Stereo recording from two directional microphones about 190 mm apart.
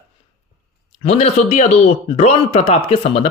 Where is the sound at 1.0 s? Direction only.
35° left (ahead or behind).